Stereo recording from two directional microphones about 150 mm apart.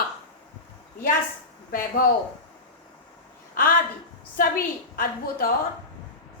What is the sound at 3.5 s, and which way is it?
A woman's voice, 65° left (ahead or behind).